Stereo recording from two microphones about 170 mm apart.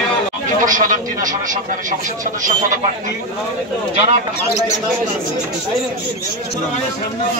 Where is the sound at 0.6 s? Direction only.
50° right (ahead or behind).